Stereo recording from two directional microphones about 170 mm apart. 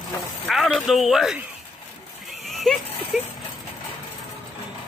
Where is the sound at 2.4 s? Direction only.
Centre (ahead or behind).